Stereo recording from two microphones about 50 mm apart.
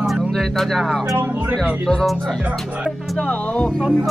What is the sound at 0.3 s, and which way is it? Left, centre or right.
Speech, centre.